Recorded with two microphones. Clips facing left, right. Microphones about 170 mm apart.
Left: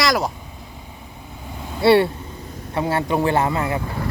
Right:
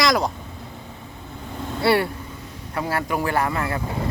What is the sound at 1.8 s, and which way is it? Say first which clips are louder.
Speech: left 5 dB; 25° left (ahead or behind).